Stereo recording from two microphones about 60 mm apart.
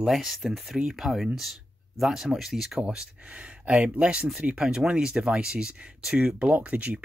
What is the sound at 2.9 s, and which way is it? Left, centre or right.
Speech, centre.